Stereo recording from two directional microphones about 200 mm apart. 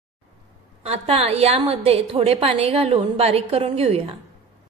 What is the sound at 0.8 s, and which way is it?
A woman's voice, 30° right (ahead or behind).